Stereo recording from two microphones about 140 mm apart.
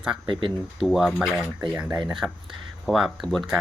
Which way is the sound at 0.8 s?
Centre (ahead or behind).